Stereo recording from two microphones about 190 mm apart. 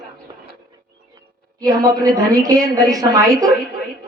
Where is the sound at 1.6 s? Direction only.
20° right (ahead or behind).